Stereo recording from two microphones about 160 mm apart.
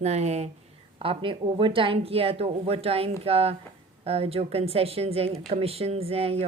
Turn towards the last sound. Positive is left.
turn(degrees=-40)  # may be behind; listen again after turning